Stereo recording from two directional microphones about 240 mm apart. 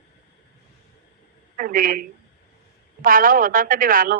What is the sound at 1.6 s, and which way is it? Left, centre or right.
Speech, right.